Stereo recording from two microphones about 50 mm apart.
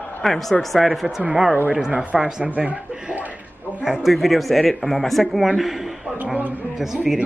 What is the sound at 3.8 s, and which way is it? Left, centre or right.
Speech, centre.